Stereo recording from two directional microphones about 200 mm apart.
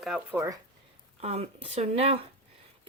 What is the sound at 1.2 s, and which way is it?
Speech, 30° right (ahead or behind).